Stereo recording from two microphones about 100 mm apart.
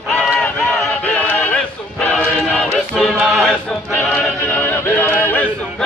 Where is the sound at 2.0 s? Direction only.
10° left (ahead or behind).